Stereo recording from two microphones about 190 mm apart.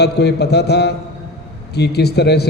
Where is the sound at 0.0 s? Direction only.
60° left (ahead or behind).